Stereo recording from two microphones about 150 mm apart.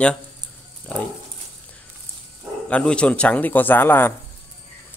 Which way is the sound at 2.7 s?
5° left (ahead or behind).